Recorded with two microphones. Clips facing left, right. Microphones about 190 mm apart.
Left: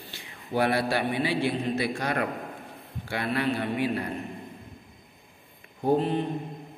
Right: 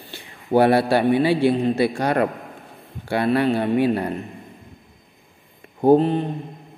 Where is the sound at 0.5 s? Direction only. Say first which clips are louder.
Right 10 dB; 55° right (ahead or behind).